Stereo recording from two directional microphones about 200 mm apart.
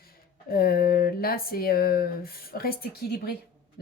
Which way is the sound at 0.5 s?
50° left (ahead or behind).